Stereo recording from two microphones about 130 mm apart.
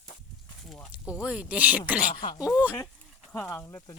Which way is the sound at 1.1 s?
10° right (ahead or behind).